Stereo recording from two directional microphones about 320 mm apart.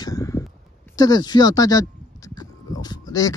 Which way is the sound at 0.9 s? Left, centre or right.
Centre.